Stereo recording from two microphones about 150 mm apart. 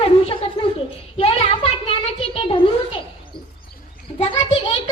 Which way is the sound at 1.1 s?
40° left (ahead or behind).